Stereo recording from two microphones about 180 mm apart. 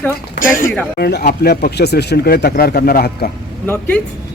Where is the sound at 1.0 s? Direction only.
60° left (ahead or behind).